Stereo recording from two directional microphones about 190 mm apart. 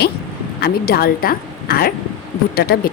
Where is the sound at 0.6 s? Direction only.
55° left (ahead or behind).